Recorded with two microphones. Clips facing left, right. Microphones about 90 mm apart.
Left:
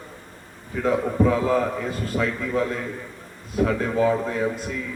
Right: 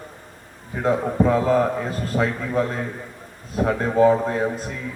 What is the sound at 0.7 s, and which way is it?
A man's voice, 30° right (ahead or behind).